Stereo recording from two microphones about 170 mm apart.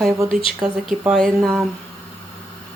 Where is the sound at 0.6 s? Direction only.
5° right (ahead or behind).